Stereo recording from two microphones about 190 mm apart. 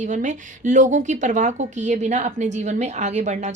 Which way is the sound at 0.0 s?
40° right (ahead or behind).